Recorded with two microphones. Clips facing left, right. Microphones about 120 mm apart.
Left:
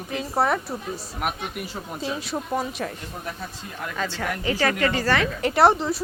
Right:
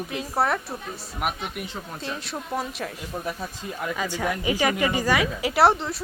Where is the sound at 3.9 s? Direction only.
10° right (ahead or behind).